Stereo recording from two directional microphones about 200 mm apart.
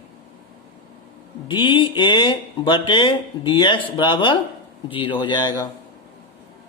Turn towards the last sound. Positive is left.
turn(degrees=20)  # may be behind; listen again after turning